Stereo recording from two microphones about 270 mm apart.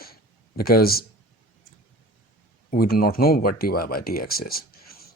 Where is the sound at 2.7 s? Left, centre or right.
Left.